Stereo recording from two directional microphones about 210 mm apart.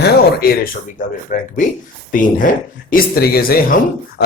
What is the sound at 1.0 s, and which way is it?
Speech, 40° left (ahead or behind).